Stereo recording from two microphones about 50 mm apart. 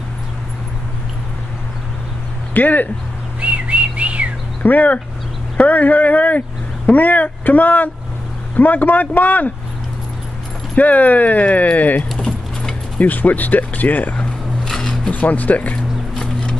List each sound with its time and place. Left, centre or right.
2.5 s speech: left
3.3 s whistling: right
4.6 s speech: left
10.8 s speech: left
12.3 s keys jangling: centre
13.0 s speech: left
14.6 s a sound: centre
15.0 s speech: left
16.2 s a sound: centre